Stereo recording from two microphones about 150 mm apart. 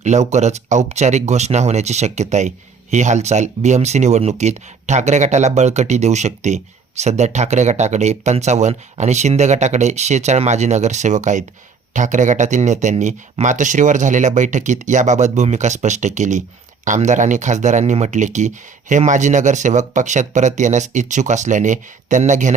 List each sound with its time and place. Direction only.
0.0 s speech: 50° right (ahead or behind)